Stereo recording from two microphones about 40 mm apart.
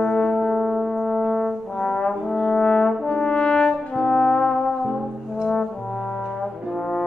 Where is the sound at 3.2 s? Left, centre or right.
Left.